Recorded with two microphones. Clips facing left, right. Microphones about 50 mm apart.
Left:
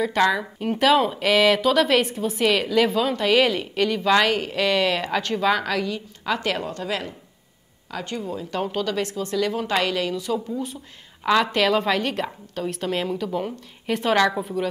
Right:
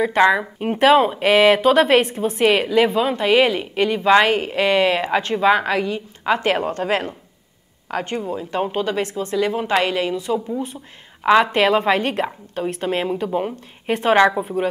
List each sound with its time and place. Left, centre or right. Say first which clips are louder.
0.0 s a woman's voice: right 5 dB; right